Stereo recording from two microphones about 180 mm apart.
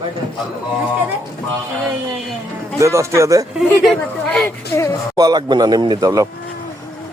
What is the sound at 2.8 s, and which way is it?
Speech, 15° right (ahead or behind).